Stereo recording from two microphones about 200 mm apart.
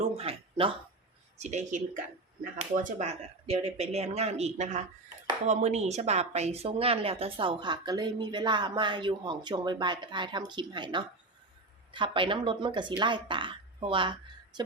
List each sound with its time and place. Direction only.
0.0 s speech: 30° right (ahead or behind)